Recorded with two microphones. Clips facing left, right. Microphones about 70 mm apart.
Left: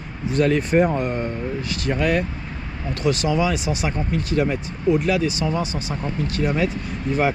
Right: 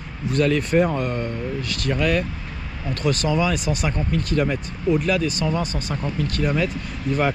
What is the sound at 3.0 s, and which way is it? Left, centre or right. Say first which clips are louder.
Speech: left 1 dB; right.